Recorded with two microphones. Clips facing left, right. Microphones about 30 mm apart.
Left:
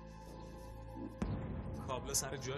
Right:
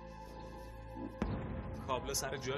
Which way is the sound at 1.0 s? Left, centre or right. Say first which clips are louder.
Right 2 dB; right.